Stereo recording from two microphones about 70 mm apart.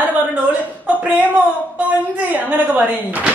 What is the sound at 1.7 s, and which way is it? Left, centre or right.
A woman's voice, right.